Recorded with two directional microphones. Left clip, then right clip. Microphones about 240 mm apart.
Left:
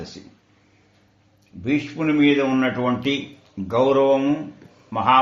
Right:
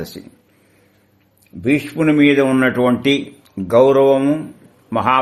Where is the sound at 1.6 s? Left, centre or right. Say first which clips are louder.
Right 6 dB; right.